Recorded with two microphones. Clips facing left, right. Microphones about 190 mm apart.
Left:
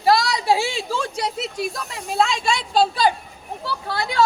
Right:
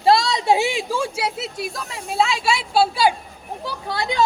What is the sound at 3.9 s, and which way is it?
Speech, 20° right (ahead or behind).